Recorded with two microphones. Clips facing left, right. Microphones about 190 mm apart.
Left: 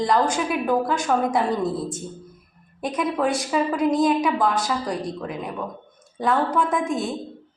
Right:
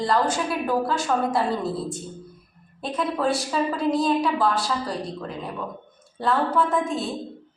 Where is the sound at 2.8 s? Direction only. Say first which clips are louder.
Left 2 dB; 15° left (ahead or behind).